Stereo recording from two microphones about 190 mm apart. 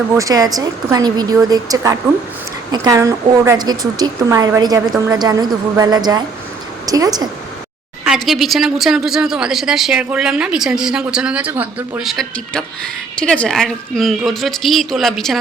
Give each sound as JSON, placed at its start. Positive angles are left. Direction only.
{"t": 0.2, "sound": "a woman's voice", "side_deg": -20}
{"t": 8.0, "sound": "a woman's voice", "side_deg": 0}